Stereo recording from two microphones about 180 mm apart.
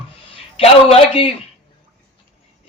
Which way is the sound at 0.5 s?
30° left (ahead or behind).